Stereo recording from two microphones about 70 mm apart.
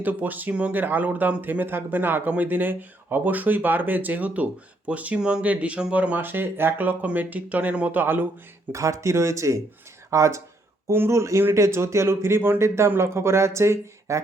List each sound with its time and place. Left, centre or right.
0.0 s speech: right
8.7 s speech: right